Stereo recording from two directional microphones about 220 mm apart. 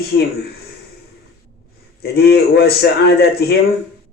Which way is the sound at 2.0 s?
45° left (ahead or behind).